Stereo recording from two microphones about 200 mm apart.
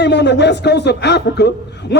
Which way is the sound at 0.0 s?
60° left (ahead or behind).